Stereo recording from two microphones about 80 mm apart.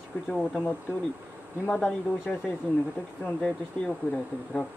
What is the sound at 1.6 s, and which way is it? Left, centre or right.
Speech, centre.